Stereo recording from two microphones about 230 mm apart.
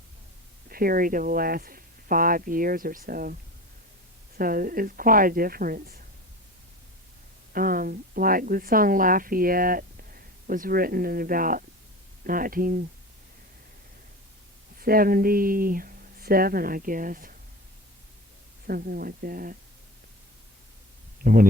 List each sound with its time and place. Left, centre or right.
0.7 s a woman's voice: right
4.4 s a woman's voice: right
7.5 s a woman's voice: right
14.8 s a woman's voice: right
18.7 s a woman's voice: right
21.2 s a woman's voice: right